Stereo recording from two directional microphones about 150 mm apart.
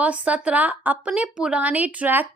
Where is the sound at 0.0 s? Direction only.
10° right (ahead or behind).